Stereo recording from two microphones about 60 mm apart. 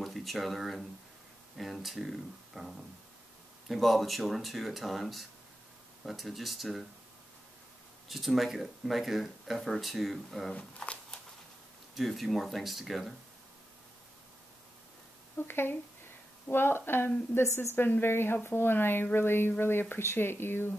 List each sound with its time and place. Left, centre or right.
0.0 s speech: centre
8.1 s speech: centre
10.5 s speech: centre
11.9 s speech: centre
15.3 s a woman's voice: left